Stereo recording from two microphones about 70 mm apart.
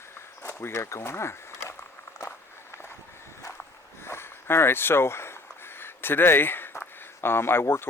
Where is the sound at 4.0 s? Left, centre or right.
Left.